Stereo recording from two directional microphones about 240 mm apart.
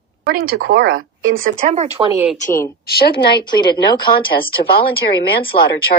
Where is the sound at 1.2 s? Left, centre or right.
Right.